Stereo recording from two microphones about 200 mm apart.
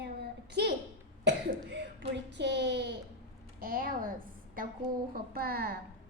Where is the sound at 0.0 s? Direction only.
55° right (ahead or behind).